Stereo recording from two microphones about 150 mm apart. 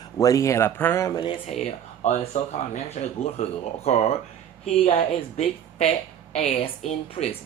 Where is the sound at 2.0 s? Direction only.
50° left (ahead or behind).